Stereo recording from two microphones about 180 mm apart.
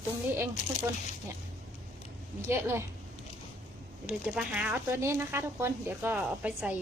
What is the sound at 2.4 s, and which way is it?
Speech, 15° right (ahead or behind).